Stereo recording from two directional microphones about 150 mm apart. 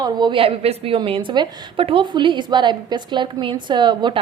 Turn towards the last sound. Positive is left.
turn(degrees=-30)  # may be behind; listen again after turning